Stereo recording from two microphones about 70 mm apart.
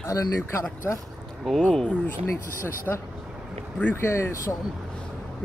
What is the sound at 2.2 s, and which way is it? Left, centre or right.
Speech, left.